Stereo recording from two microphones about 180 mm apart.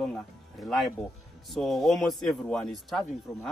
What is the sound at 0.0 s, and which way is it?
Speech, 5° left (ahead or behind).